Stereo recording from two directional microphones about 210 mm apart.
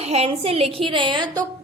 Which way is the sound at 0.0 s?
30° right (ahead or behind).